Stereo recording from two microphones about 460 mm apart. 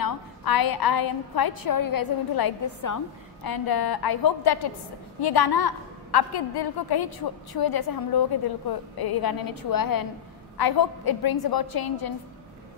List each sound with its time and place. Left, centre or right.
0.0 s a woman's voice: left